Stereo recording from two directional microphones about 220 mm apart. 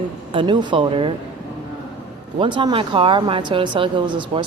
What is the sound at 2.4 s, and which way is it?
Speech, 20° right (ahead or behind).